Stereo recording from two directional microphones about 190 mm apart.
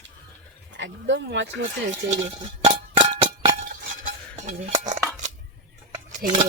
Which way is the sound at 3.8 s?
40° right (ahead or behind).